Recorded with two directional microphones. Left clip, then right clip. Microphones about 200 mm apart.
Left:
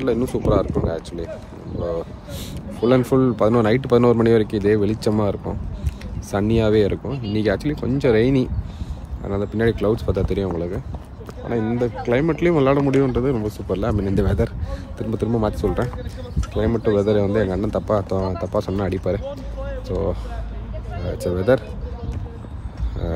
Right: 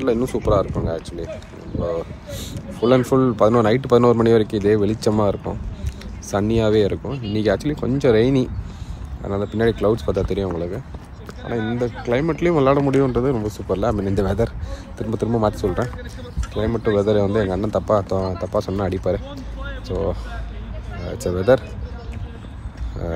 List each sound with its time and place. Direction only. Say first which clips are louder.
0.0 s speech: right 1 dB; 10° left (ahead or behind)